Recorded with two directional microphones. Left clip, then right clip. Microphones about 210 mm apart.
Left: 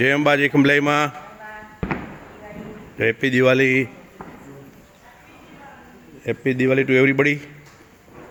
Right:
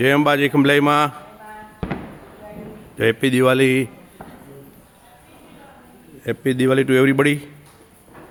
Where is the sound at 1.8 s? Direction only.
20° right (ahead or behind).